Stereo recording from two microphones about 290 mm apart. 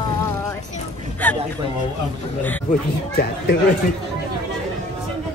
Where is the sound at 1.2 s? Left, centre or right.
Centre.